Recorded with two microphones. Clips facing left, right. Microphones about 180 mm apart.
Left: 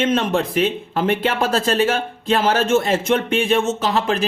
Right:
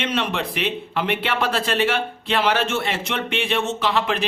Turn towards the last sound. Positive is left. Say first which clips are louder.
# left 2 dB
turn(degrees=40)  # may be behind; listen again after turning